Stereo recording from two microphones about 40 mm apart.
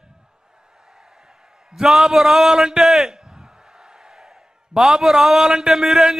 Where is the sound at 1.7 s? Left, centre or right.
Centre.